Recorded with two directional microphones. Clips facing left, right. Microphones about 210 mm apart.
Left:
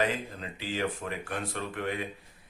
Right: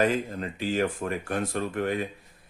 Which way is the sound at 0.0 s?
45° right (ahead or behind).